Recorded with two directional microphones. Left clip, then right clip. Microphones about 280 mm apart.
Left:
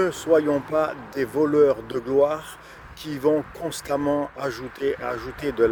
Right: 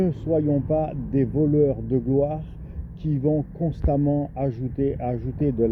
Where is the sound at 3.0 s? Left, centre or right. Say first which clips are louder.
Left 3 dB; centre.